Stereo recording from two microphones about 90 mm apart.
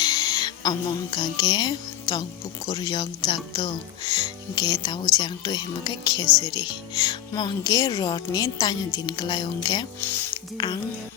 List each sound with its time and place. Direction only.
0.0 s speech: 45° left (ahead or behind)
2.1 s speech: 40° left (ahead or behind)
10.0 s speech: 25° left (ahead or behind)